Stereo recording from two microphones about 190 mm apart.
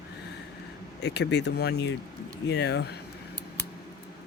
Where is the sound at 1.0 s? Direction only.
65° left (ahead or behind).